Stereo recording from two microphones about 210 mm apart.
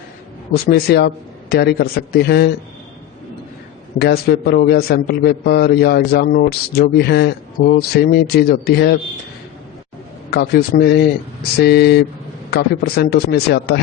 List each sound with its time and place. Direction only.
0.5 s a man's voice: 50° left (ahead or behind)
3.9 s a man's voice: 50° left (ahead or behind)
10.2 s a man's voice: 50° left (ahead or behind)